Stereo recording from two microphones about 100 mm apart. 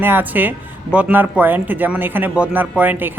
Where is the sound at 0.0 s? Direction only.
20° right (ahead or behind).